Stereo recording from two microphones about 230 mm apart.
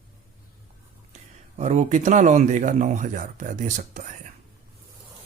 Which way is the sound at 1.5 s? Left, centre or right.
Right.